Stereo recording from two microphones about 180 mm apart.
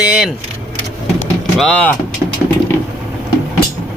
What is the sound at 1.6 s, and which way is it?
Speech, 5° left (ahead or behind).